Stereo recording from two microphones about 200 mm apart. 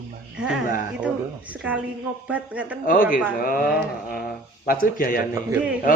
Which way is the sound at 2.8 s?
40° left (ahead or behind).